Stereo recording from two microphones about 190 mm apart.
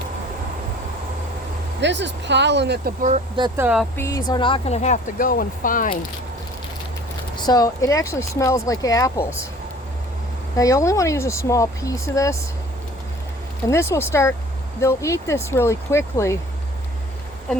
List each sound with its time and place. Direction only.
1.8 s speech: 70° right (ahead or behind)
3.6 s speech: 5° right (ahead or behind)
3.9 s speech: 15° left (ahead or behind)
4.3 s speech: 25° left (ahead or behind); by 6.0 s 45° left (ahead or behind)
7.3 s speech: 20° left (ahead or behind)
10.6 s speech: 15° left (ahead or behind)
13.7 s speech: 15° left (ahead or behind)